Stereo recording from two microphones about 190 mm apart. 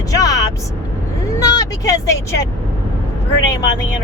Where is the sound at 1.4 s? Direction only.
20° left (ahead or behind).